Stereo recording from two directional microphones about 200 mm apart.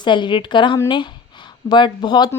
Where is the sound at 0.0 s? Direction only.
25° left (ahead or behind).